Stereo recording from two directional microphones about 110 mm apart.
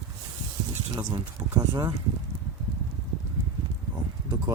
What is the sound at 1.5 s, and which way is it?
Speech, 30° right (ahead or behind).